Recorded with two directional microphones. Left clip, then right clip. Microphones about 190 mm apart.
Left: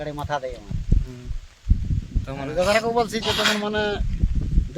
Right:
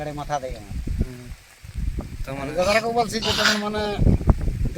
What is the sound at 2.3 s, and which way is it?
Speech, centre (ahead or behind).